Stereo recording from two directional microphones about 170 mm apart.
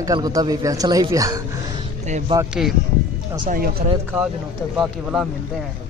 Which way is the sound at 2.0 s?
45° right (ahead or behind).